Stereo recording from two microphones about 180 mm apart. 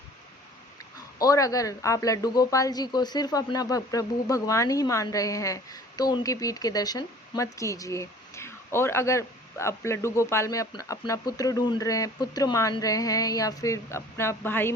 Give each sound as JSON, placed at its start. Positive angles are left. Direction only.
{"t": 0.9, "sound": "speech", "side_deg": 20}